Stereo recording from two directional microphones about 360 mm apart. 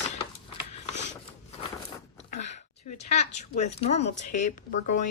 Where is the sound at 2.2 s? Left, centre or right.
Centre.